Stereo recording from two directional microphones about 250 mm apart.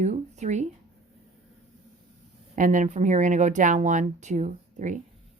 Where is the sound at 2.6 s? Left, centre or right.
Right.